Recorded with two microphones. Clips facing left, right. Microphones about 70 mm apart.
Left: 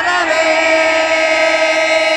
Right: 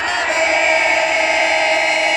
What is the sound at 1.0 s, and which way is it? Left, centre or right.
Vehicle, left.